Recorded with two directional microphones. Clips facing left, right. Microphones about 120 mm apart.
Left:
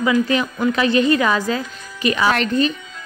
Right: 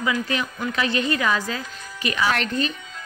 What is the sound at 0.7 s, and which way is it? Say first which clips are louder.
Speech: left 7 dB; 25° left (ahead or behind).